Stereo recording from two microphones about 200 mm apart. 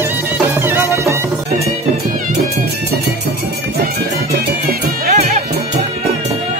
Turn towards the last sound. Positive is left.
turn(degrees=-45)  # may be behind; listen again after turning